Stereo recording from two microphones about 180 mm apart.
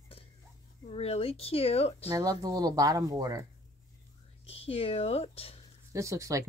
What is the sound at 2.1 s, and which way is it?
Speech, 20° right (ahead or behind).